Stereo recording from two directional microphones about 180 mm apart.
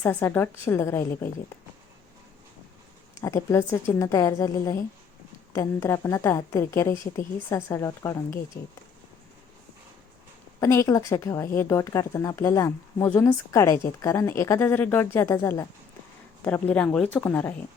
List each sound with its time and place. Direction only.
0.0 s speech: 15° left (ahead or behind)
3.2 s speech: 15° left (ahead or behind)
10.6 s speech: 15° left (ahead or behind)